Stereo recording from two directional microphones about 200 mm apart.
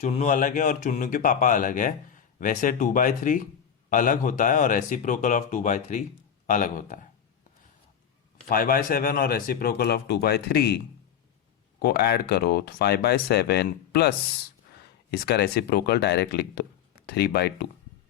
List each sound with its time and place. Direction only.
0.0 s speech: 35° left (ahead or behind)
8.4 s speech: 45° left (ahead or behind)
11.8 s speech: 55° left (ahead or behind)
15.1 s speech: 55° left (ahead or behind)